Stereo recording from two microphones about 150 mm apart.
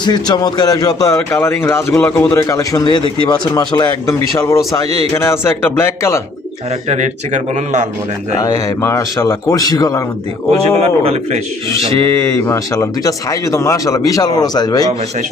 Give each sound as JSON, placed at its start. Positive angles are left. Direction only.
{"t": 0.0, "sound": "a man's voice", "side_deg": 30}
{"t": 6.8, "sound": "speech", "side_deg": -50}
{"t": 8.4, "sound": "speech", "side_deg": 20}
{"t": 10.7, "sound": "speech", "side_deg": -45}
{"t": 12.1, "sound": "speech", "side_deg": 20}